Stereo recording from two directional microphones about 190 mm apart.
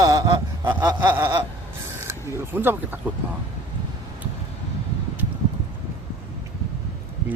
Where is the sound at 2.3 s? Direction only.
10° right (ahead or behind).